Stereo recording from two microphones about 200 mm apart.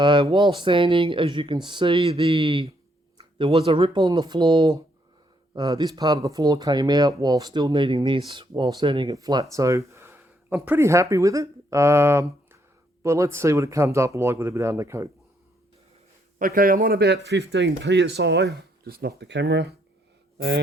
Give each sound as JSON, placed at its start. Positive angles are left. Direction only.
{"t": 0.0, "sound": "speech", "side_deg": -25}
{"t": 16.4, "sound": "speech", "side_deg": -45}